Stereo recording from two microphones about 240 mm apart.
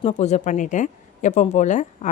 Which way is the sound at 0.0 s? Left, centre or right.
Left.